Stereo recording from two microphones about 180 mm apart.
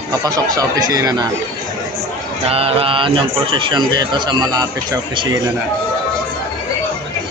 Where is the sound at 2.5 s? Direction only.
30° right (ahead or behind).